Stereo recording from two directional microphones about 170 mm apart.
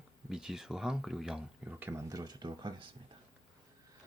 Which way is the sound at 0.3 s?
5° right (ahead or behind).